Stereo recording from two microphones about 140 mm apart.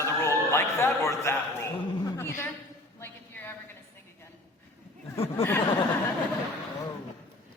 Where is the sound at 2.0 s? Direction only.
20° left (ahead or behind).